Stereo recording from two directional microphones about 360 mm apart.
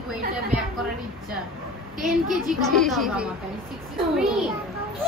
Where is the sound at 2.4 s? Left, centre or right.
Centre.